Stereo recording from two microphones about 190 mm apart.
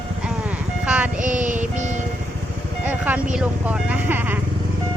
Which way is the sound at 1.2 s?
40° right (ahead or behind).